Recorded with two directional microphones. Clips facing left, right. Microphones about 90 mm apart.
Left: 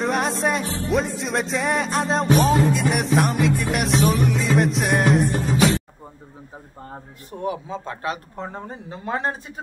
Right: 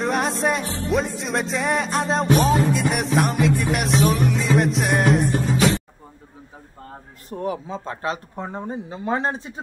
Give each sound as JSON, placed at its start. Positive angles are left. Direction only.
{"t": 0.0, "sound": "music", "side_deg": 0}
{"t": 7.2, "sound": "speech", "side_deg": -40}
{"t": 8.5, "sound": "speech", "side_deg": -15}